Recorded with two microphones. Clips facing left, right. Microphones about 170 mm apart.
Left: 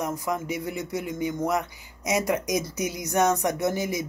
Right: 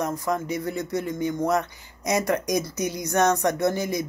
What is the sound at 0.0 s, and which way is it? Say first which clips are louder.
Speech: right 2 dB; 15° left (ahead or behind).